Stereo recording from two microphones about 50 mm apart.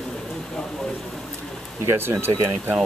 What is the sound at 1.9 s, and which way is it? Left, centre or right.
Speech, right.